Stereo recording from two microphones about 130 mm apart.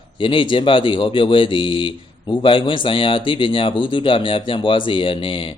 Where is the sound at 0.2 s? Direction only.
40° left (ahead or behind).